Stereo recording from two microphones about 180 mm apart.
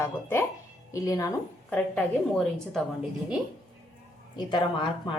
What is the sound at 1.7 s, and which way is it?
A woman's voice, 5° left (ahead or behind).